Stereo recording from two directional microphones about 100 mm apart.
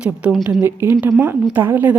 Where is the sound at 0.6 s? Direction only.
20° right (ahead or behind).